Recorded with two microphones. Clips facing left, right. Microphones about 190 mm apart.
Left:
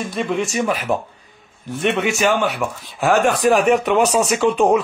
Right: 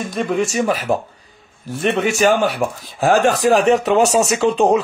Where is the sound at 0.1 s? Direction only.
45° right (ahead or behind).